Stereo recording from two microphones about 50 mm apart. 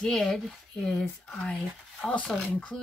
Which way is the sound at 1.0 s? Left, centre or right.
Left.